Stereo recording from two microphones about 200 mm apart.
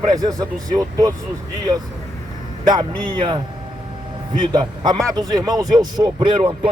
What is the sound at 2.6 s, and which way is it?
A man's voice, 20° right (ahead or behind).